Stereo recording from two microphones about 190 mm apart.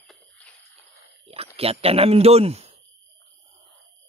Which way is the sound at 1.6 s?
30° right (ahead or behind).